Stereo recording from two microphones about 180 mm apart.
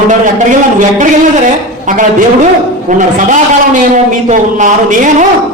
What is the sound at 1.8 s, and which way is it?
A man's voice, 45° right (ahead or behind).